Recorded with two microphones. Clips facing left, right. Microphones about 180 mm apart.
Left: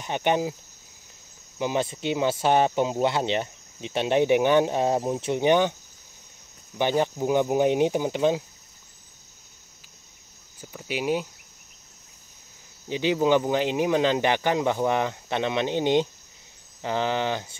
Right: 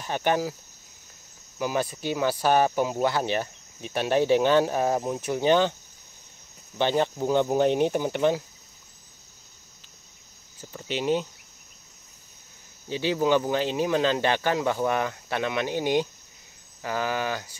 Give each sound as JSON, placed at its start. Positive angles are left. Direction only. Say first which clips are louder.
{"t": 0.0, "sound": "speech", "louder": "left 1 dB", "side_deg": 20}
{"t": 1.6, "sound": "speech", "louder": "left 1 dB", "side_deg": 20}
{"t": 6.8, "sound": "speech", "louder": "even", "side_deg": 15}
{"t": 10.6, "sound": "speech", "louder": "even", "side_deg": 10}
{"t": 12.8, "sound": "speech", "louder": "left 2 dB", "side_deg": 15}